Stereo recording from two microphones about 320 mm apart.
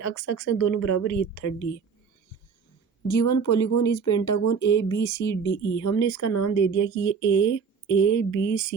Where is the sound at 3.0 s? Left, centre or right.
Left.